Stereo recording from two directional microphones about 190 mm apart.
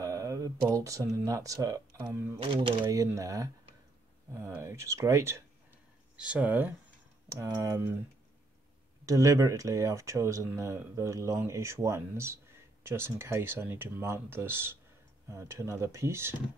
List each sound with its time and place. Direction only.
0.0 s a sound: 20° right (ahead or behind)
2.0 s speech: 15° right (ahead or behind)
2.3 s speech: 25° right (ahead or behind)
2.9 s speech: 15° right (ahead or behind)
9.0 s speech: 15° right (ahead or behind)